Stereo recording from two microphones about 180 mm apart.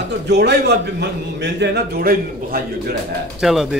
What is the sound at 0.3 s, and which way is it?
A man's voice, 65° right (ahead or behind).